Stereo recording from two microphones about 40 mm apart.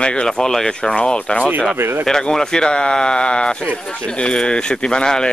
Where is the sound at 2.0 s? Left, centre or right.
Centre.